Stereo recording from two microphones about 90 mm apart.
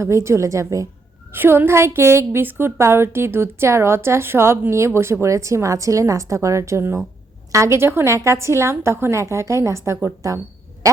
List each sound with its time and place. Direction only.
0.0 s a woman's voice: 30° right (ahead or behind)
1.3 s a woman's voice: 25° right (ahead or behind)